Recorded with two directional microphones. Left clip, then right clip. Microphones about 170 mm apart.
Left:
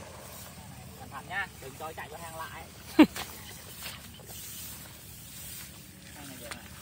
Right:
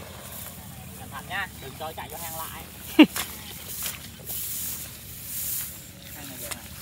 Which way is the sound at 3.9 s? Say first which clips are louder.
Right 6 dB; 25° right (ahead or behind).